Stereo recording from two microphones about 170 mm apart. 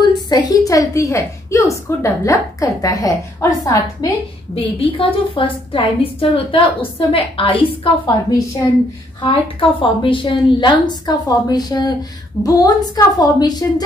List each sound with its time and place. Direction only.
0.3 s a woman's voice: 25° left (ahead or behind)
4.6 s a woman's voice: 30° left (ahead or behind)